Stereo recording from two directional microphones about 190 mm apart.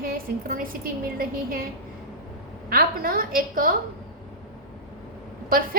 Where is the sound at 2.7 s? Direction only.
50° right (ahead or behind).